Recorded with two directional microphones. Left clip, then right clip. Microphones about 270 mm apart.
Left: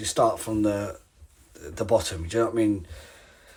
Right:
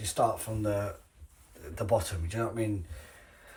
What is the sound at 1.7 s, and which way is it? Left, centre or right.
Speech, centre.